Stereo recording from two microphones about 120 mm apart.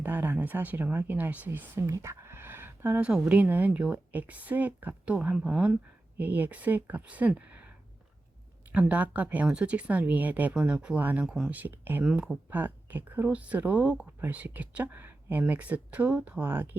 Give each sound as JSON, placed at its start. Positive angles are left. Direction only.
{"t": 0.0, "sound": "speech", "side_deg": -15}
{"t": 8.7, "sound": "speech", "side_deg": -10}
{"t": 12.0, "sound": "speech", "side_deg": -5}